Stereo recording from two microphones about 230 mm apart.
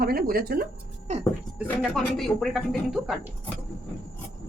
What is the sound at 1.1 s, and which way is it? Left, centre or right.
Speech, right.